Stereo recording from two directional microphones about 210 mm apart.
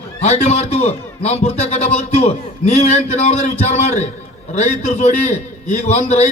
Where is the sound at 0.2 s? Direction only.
30° left (ahead or behind).